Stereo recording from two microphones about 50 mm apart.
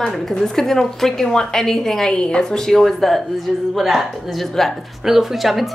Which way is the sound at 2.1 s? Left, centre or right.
Centre.